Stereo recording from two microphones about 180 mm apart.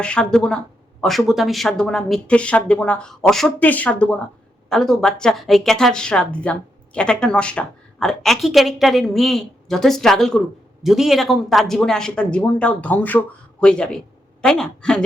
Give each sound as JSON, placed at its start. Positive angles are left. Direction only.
{"t": 0.0, "sound": "speech", "side_deg": 5}